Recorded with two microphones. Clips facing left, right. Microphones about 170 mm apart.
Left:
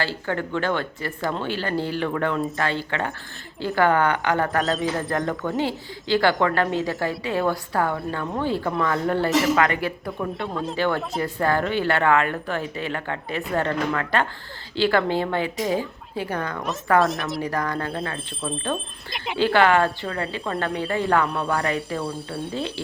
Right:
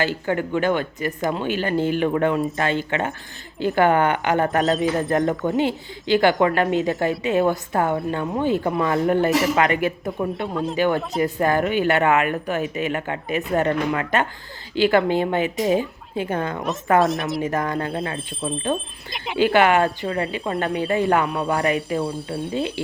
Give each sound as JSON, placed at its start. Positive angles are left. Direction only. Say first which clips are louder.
{"t": 0.0, "sound": "a woman's voice", "louder": "right 4 dB", "side_deg": -15}
{"t": 10.5, "sound": "speech", "louder": "right 3 dB", "side_deg": 0}
{"t": 10.8, "sound": "a woman's voice", "louder": "right 4 dB", "side_deg": -15}
{"t": 17.0, "sound": "speech", "louder": "right 2 dB", "side_deg": 0}
{"t": 17.4, "sound": "a woman's voice", "louder": "right 3 dB", "side_deg": -20}
{"t": 18.7, "sound": "speech", "louder": "right 3 dB", "side_deg": 0}
{"t": 19.4, "sound": "a woman's voice", "louder": "right 2 dB", "side_deg": -20}
{"t": 21.2, "sound": "speech", "louder": "right 2 dB", "side_deg": 0}
{"t": 21.5, "sound": "a woman's voice", "louder": "right 5 dB", "side_deg": -20}
{"t": 21.8, "sound": "speech", "louder": "right 4 dB", "side_deg": 0}
{"t": 22.5, "sound": "a woman's voice", "louder": "right 5 dB", "side_deg": -20}